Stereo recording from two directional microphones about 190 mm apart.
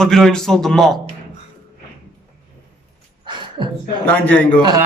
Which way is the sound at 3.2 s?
25° right (ahead or behind).